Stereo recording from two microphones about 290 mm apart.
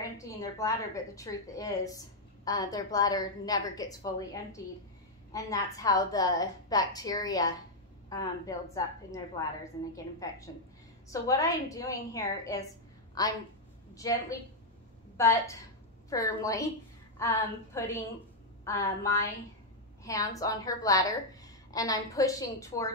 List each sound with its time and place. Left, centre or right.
0.2 s a woman's voice: centre